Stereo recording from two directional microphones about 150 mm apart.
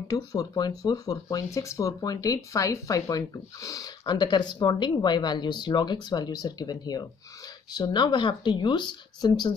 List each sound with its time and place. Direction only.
0.1 s speech: 25° left (ahead or behind)